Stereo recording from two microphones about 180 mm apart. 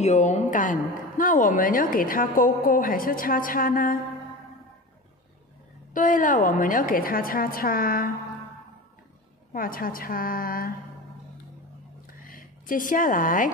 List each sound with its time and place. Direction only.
0.0 s speech: 40° left (ahead or behind)
5.9 s speech: 45° left (ahead or behind)
9.5 s speech: 50° left (ahead or behind)
12.2 s speech: 50° left (ahead or behind)